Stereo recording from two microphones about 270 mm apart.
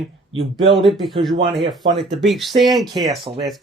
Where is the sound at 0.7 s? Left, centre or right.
Centre.